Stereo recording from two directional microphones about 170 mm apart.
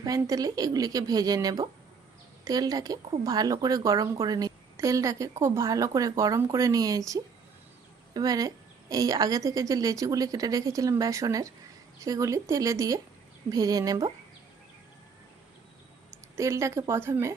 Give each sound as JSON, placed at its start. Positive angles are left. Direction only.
{"t": 0.0, "sound": "speech", "side_deg": -20}
{"t": 16.3, "sound": "speech", "side_deg": -15}